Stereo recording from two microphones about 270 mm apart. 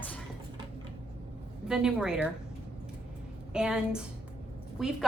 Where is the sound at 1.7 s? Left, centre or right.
Centre.